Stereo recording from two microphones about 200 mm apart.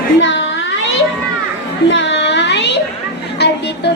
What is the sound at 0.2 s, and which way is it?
Cat, 70° left (ahead or behind).